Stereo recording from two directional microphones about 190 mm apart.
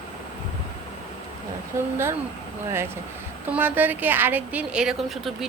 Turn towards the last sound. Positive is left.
turn(degrees=0)  # may be behind; listen again after turning